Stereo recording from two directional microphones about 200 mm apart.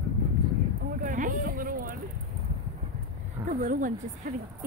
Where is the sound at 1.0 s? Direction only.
40° right (ahead or behind).